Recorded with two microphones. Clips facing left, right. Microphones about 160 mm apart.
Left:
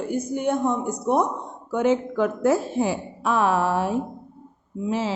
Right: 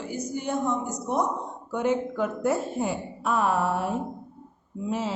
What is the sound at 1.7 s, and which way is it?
A woman's voice, 90° left.